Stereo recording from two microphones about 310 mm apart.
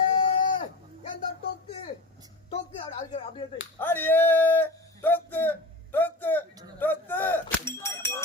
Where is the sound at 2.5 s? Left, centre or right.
Centre.